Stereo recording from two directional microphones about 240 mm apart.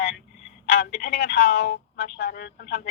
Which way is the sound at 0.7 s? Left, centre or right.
Left.